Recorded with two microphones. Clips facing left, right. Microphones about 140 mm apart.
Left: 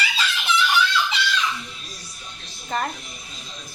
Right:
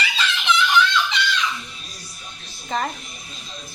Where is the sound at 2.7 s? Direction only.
Centre (ahead or behind).